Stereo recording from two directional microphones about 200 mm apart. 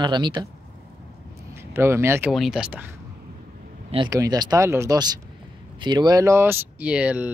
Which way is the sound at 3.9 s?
20° right (ahead or behind).